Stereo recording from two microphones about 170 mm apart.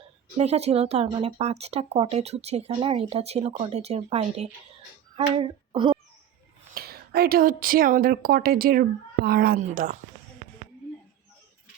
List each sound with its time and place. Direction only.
0.3 s speech: 40° right (ahead or behind)
5.1 s female singing: 35° right (ahead or behind)
6.7 s a woman's voice: 65° right (ahead or behind)
9.6 s speech: 50° right (ahead or behind)